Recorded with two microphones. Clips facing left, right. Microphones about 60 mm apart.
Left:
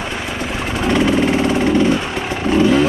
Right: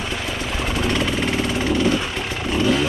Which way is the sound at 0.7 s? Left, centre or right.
Centre.